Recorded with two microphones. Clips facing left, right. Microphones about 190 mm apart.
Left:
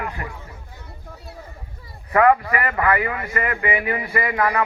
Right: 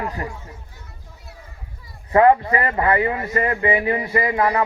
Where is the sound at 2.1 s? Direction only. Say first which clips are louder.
Right 2 dB; 30° right (ahead or behind).